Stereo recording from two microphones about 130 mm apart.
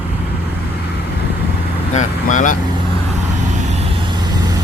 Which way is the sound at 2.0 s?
85° left.